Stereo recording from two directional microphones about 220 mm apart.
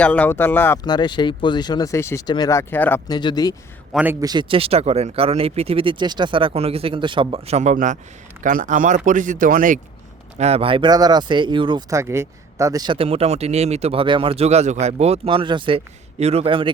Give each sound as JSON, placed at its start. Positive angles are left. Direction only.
{"t": 0.0, "sound": "speech", "side_deg": 5}
{"t": 3.9, "sound": "speech", "side_deg": -10}